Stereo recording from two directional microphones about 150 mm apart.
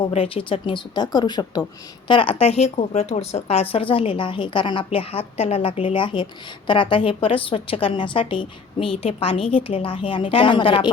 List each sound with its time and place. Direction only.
0.0 s a woman's voice: 40° left (ahead or behind)